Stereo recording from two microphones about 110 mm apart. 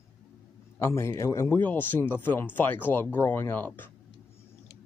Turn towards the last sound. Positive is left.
turn(degrees=20)  # may be behind; listen again after turning